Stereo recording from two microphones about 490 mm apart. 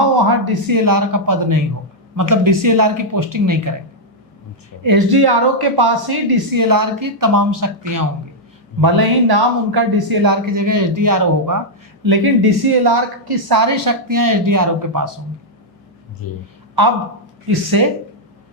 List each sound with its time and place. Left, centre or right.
0.4 s speech: right
4.8 s speech: right
16.2 s a woman's voice: left
17.7 s speech: right